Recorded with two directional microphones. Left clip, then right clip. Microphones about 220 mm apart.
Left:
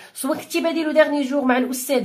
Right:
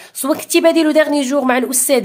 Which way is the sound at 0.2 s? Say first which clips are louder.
Right 9 dB; 35° right (ahead or behind).